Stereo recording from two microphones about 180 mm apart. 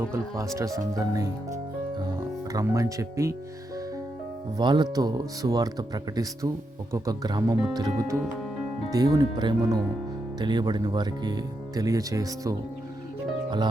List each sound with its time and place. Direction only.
0.0 s speech: 15° right (ahead or behind)
4.5 s speech: 25° right (ahead or behind)